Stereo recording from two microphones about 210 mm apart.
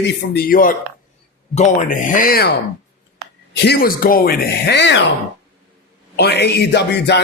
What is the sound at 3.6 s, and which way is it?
Speech, 50° left (ahead or behind).